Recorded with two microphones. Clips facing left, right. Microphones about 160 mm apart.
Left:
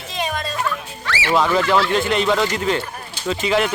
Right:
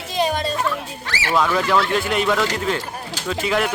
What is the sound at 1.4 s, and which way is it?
Speech, centre (ahead or behind).